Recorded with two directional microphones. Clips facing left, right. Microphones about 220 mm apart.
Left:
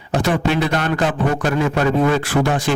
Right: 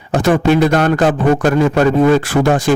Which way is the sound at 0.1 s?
45° right (ahead or behind).